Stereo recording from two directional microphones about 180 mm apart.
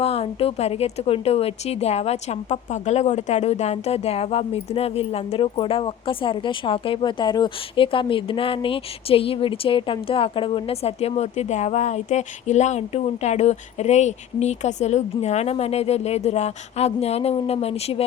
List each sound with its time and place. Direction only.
0.0 s a woman's voice: 35° left (ahead or behind)